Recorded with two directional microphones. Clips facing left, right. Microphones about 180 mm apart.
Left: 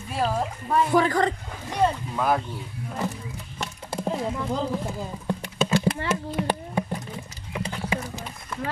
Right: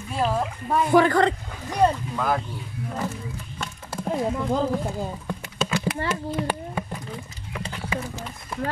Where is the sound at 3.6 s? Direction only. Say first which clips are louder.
Left 2 dB; 20° left (ahead or behind).